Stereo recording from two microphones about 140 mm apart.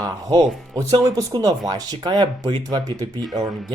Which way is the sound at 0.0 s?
25° right (ahead or behind).